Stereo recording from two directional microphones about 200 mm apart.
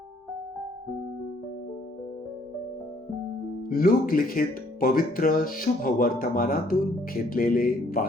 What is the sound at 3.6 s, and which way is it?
Speech, 45° left (ahead or behind).